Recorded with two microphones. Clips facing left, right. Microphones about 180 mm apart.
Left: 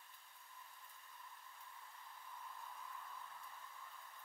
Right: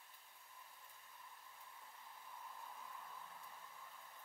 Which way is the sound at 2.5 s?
20° right (ahead or behind).